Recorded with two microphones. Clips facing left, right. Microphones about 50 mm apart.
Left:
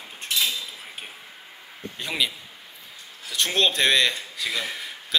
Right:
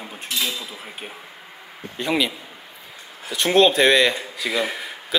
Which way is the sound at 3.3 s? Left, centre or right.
Centre.